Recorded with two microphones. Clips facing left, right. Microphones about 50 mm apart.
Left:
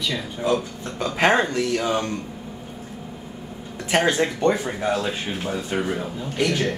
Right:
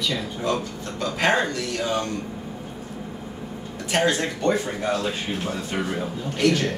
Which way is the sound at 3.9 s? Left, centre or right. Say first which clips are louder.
Left 2 dB; left.